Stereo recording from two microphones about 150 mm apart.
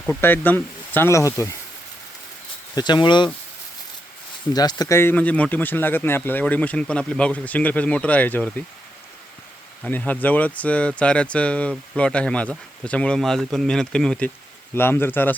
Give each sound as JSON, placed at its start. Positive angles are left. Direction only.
{"t": 0.0, "sound": "speech", "side_deg": 10}
{"t": 2.7, "sound": "speech", "side_deg": 30}
{"t": 4.5, "sound": "speech", "side_deg": 25}
{"t": 9.8, "sound": "speech", "side_deg": 10}